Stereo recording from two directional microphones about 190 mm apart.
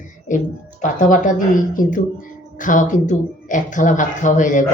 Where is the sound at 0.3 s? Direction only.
40° left (ahead or behind).